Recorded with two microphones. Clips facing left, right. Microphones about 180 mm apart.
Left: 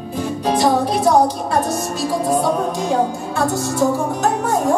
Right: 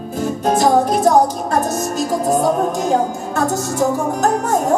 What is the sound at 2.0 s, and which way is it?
Music, 45° right (ahead or behind).